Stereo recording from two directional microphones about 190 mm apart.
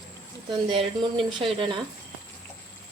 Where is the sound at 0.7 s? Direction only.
25° right (ahead or behind).